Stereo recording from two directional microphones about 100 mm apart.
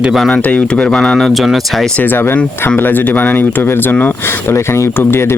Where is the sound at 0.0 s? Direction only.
Centre (ahead or behind).